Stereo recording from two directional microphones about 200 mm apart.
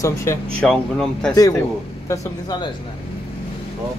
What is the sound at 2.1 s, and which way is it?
Speech, 20° left (ahead or behind).